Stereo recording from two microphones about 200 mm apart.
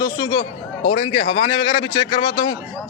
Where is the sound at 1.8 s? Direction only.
20° left (ahead or behind).